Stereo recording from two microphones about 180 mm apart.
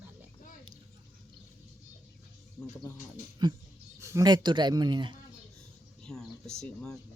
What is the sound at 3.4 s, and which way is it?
Speech, 25° right (ahead or behind).